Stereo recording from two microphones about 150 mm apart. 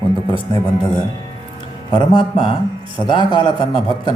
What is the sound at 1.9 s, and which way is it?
Speech, 35° left (ahead or behind).